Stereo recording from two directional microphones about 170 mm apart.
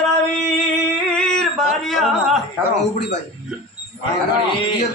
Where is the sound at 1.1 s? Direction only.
5° left (ahead or behind).